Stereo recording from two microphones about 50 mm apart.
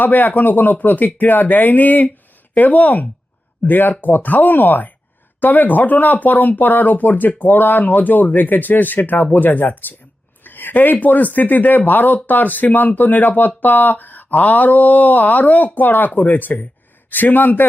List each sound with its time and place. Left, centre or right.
0.0 s speech: left
10.4 s a sound: left
11.0 s speech: left